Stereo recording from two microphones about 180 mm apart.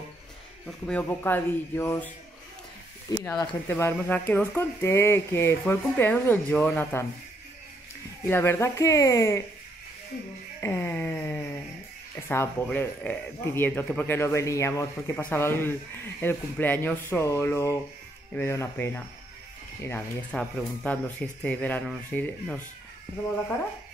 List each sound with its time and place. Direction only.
0.7 s speech: 5° left (ahead or behind)
3.1 s speech: 15° left (ahead or behind)
8.3 s speech: 15° left (ahead or behind)
10.6 s a sound: 10° left (ahead or behind)
12.2 s speech: 15° left (ahead or behind)